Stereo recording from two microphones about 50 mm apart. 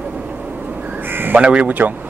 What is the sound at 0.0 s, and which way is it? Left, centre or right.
Duck, right.